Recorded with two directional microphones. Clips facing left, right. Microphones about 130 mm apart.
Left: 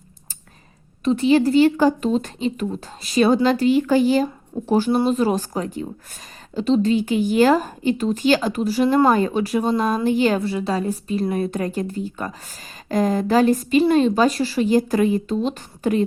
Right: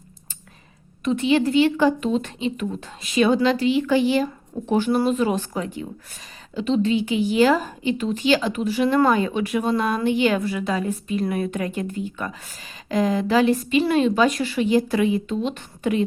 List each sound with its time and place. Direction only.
1.0 s a woman's voice: 35° left (ahead or behind)
4.7 s a woman's voice: 30° left (ahead or behind)